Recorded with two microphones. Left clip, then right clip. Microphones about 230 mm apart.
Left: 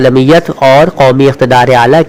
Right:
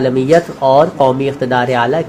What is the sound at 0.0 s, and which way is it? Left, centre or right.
Speech, left.